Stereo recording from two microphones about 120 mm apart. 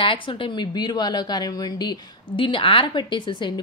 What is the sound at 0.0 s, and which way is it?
A woman's voice, 45° left (ahead or behind).